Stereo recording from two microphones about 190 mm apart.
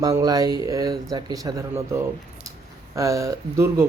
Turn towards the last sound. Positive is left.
turn(degrees=-15)  # may be behind; listen again after turning